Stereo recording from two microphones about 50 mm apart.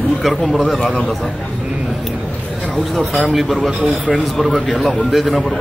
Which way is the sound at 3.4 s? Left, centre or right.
Centre.